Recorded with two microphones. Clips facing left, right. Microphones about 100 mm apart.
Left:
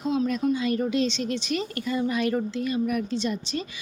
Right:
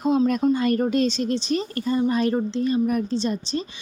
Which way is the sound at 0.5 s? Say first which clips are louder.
Right 4 dB; 50° right (ahead or behind).